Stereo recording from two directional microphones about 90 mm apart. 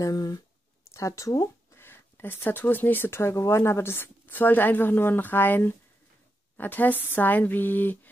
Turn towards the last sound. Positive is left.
turn(degrees=20)  # may be behind; listen again after turning